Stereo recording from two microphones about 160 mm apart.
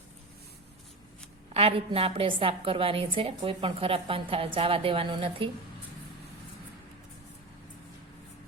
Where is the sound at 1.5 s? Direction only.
35° right (ahead or behind).